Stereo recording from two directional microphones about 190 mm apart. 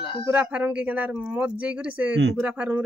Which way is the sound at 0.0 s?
25° left (ahead or behind).